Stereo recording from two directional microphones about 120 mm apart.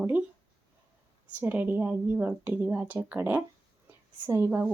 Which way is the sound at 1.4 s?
15° right (ahead or behind).